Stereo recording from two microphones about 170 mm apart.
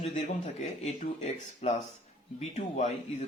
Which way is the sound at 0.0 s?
40° left (ahead or behind).